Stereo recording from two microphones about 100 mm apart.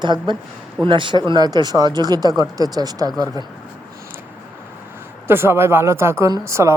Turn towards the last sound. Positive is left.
turn(degrees=-30)  # may be behind; listen again after turning